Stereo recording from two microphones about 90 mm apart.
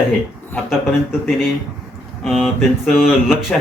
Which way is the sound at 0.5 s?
20° left (ahead or behind).